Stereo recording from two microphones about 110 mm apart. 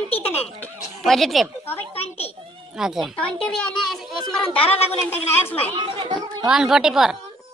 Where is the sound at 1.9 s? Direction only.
65° left (ahead or behind).